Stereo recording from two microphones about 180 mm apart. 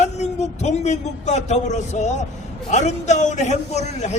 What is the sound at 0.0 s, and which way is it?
A man's voice, 40° left (ahead or behind).